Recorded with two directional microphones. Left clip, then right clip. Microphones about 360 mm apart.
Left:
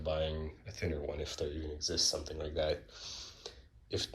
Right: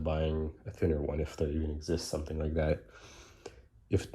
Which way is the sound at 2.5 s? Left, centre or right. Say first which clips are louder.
Right 1 dB; centre.